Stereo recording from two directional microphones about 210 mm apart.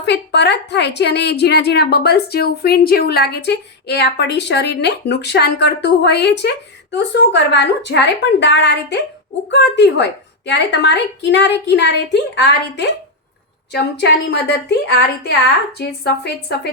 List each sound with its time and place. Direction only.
0.0 s a woman's voice: 55° left (ahead or behind)